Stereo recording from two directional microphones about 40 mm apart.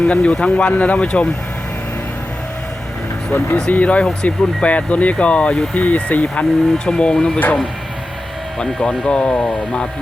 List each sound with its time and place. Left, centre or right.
0.0 s speech: left
3.5 s speech: left
6.7 s speech: left
7.3 s speech: left
8.5 s speech: centre